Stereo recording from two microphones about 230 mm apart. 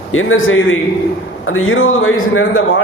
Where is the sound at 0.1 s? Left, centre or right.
Left.